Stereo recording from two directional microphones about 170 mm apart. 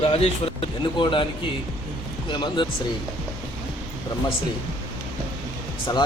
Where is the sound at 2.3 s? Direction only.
30° left (ahead or behind).